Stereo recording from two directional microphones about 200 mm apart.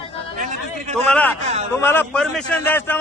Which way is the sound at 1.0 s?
10° left (ahead or behind).